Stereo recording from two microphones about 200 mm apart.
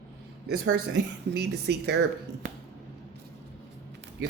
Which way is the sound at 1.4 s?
55° right (ahead or behind).